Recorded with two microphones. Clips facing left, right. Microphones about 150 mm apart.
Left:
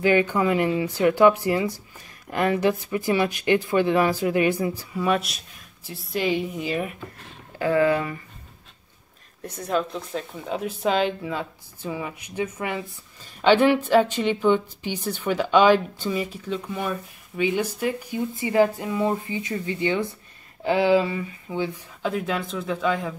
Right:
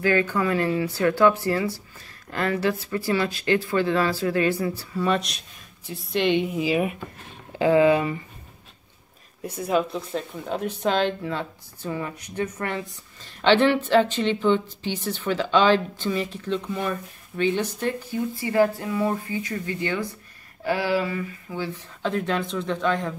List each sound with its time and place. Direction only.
0.0 s a woman's voice: 20° left (ahead or behind); by 8.2 s 20° right (ahead or behind)
9.4 s speech: 10° right (ahead or behind)